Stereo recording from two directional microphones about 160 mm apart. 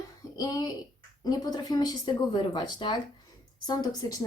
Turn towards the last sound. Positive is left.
turn(degrees=25)  # may be behind; listen again after turning